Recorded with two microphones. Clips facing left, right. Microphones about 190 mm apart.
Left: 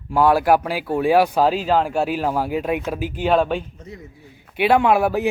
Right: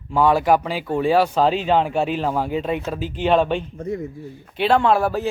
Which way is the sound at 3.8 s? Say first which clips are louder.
Right 12 dB; 50° right (ahead or behind).